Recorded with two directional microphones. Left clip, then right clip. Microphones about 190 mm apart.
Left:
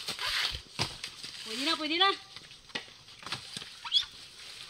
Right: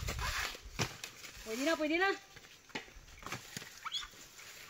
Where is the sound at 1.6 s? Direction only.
Centre (ahead or behind).